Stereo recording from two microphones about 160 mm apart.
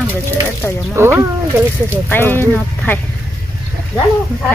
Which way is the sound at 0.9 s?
15° right (ahead or behind).